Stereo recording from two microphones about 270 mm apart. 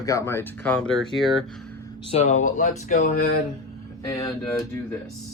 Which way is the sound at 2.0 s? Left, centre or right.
Left.